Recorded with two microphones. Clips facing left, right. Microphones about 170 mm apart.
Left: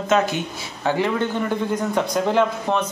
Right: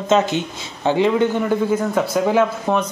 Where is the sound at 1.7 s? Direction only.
5° right (ahead or behind).